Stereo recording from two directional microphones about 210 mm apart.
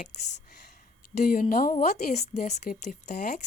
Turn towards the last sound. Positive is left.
turn(degrees=35)  # may be behind; listen again after turning